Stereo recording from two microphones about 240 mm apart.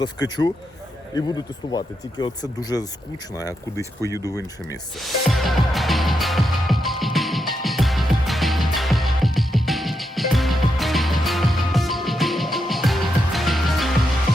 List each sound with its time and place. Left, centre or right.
0.0 s speech: centre
4.0 s speech: centre
4.9 s music: centre